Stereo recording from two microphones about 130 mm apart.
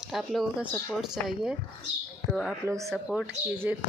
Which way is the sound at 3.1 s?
10° right (ahead or behind).